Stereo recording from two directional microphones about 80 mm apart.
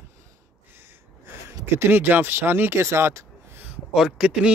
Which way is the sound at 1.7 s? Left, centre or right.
Right.